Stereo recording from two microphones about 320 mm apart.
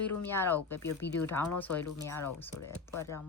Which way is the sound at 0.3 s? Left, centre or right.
Centre.